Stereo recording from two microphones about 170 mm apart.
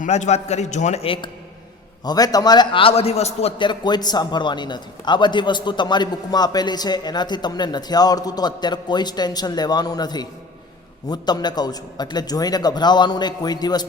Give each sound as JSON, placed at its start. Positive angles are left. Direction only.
{"t": 0.0, "sound": "a man's voice", "side_deg": 45}